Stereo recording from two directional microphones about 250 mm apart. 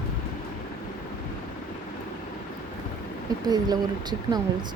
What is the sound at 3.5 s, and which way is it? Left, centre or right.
Speech, centre.